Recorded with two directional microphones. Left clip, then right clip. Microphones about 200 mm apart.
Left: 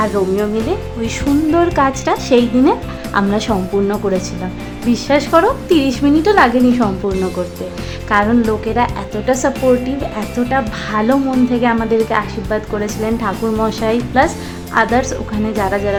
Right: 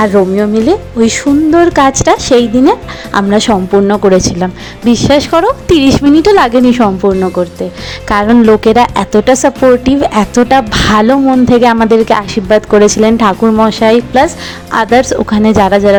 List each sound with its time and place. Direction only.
0.0 s speech: 30° right (ahead or behind)
8.1 s speech: 40° right (ahead or behind)